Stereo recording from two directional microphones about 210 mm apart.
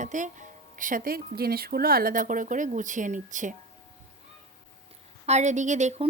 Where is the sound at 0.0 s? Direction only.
35° right (ahead or behind).